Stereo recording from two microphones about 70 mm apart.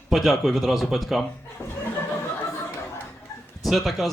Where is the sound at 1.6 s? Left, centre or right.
Left.